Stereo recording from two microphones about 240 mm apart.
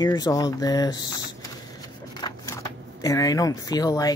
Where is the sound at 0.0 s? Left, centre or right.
Centre.